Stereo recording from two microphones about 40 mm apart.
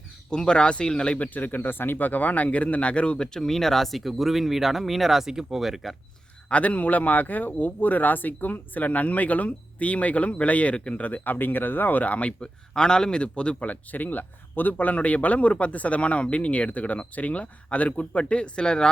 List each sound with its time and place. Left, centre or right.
0.3 s a man's voice: left
1.3 s speech: left
3.4 s speech: centre
6.5 s a man's voice: left
11.0 s speech: left
12.4 s a man's voice: left
13.7 s speech: left